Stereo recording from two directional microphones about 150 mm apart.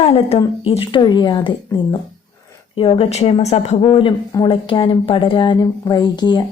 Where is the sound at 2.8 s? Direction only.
40° left (ahead or behind).